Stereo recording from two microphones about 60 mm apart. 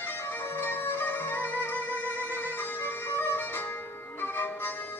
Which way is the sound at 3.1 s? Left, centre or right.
Left.